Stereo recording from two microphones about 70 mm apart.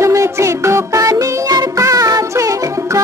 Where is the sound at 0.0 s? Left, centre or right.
Right.